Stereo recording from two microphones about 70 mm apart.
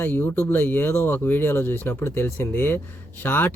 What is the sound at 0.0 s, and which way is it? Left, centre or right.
Speech, left.